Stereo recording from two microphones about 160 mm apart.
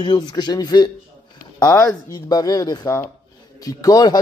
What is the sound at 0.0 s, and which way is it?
A man's voice, 25° left (ahead or behind).